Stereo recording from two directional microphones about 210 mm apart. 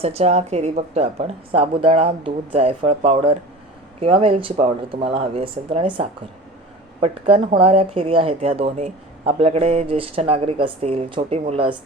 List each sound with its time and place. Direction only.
0.0 s speech: 30° right (ahead or behind)